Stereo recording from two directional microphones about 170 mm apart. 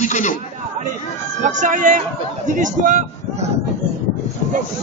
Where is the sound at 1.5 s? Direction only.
50° right (ahead or behind).